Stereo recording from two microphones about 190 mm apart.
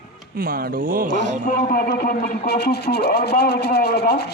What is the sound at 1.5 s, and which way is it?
Speech, 45° left (ahead or behind).